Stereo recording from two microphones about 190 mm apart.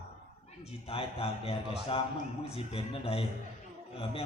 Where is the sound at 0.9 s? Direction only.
30° left (ahead or behind).